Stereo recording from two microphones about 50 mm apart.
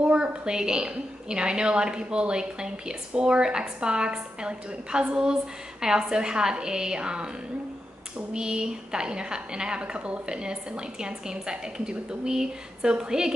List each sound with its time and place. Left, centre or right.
0.0 s a woman's voice: centre
8.3 s a woman's voice: centre